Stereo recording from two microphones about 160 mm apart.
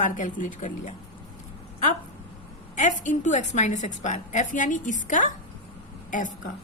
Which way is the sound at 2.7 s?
50° left (ahead or behind).